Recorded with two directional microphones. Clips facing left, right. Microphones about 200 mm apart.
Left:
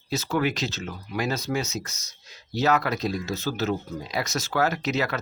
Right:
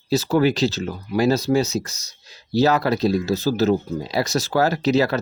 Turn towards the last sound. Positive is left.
turn(degrees=-35)  # may be behind; listen again after turning